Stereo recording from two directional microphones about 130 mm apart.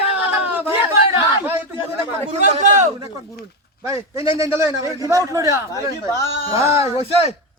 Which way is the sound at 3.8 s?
20° right (ahead or behind).